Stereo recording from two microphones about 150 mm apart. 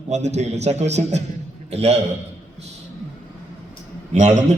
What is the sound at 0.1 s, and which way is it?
A man's voice, 50° right (ahead or behind).